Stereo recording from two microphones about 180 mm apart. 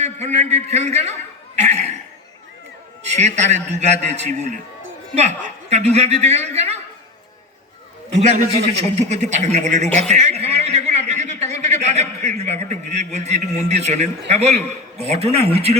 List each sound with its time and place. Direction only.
0.0 s a woman's voice: 40° right (ahead or behind)
1.5 s chuckle: 40° right (ahead or behind)
3.0 s a woman's voice: 40° right (ahead or behind)
8.1 s a woman's voice: 40° right (ahead or behind)